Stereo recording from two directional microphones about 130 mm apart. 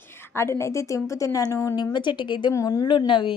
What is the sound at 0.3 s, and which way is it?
A woman's voice, 20° left (ahead or behind).